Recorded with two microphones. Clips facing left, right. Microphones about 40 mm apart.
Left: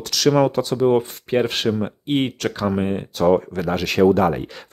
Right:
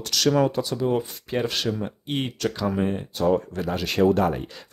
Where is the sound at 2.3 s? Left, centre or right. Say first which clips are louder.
Left 2 dB; left.